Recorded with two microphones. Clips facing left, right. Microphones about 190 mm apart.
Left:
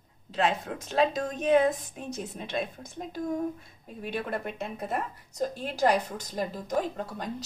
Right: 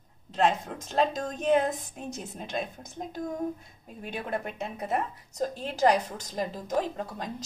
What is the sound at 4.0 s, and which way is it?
A woman's voice, centre (ahead or behind).